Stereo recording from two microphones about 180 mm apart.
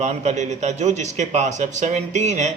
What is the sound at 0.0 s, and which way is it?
Speech, 40° right (ahead or behind).